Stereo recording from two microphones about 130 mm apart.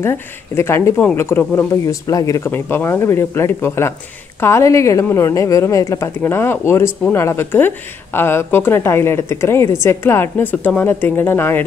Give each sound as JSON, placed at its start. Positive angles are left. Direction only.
{"t": 0.0, "sound": "a woman's voice", "side_deg": 20}